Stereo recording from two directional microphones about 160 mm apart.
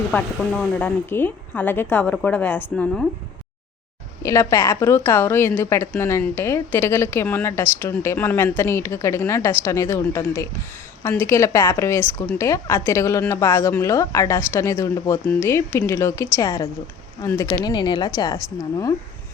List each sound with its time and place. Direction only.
0.1 s speech: 5° left (ahead or behind)
4.2 s speech: 20° left (ahead or behind)
17.5 s speech: 25° left (ahead or behind)